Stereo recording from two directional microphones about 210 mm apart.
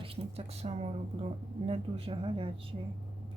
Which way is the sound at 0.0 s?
25° right (ahead or behind).